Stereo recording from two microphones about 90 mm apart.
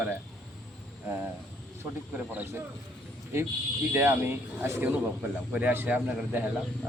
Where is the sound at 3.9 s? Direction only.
25° right (ahead or behind).